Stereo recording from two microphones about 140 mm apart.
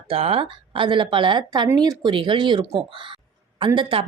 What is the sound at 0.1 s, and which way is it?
Speech, 40° right (ahead or behind).